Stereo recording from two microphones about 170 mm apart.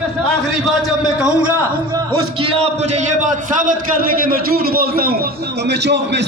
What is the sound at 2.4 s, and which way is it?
A man's voice, 35° right (ahead or behind).